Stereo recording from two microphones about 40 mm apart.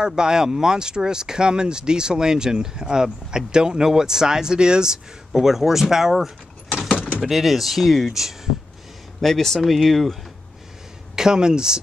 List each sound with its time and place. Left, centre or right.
0.0 s speech: centre
6.1 s vehicle: centre
7.2 s speech: centre
9.2 s speech: centre
11.1 s speech: centre